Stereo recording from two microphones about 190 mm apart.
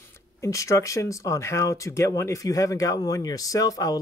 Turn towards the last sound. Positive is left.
turn(degrees=20)  # may be behind; listen again after turning